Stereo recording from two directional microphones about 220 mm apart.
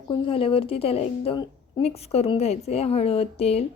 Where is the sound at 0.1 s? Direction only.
25° left (ahead or behind).